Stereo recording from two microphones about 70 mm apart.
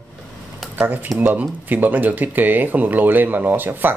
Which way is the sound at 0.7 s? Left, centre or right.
Right.